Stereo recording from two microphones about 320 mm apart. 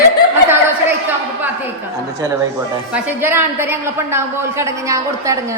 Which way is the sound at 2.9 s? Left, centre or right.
Centre.